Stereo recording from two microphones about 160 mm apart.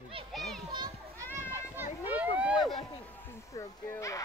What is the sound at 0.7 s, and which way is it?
Children playing, 25° right (ahead or behind).